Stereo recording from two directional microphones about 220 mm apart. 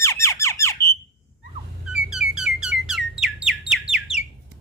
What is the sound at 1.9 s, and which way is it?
Alarm, 5° right (ahead or behind).